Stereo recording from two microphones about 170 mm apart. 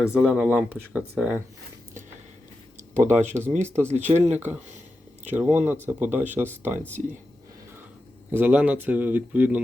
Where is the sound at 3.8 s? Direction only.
40° right (ahead or behind).